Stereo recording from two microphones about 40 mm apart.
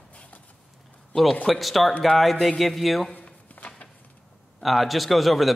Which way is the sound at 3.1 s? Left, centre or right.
Left.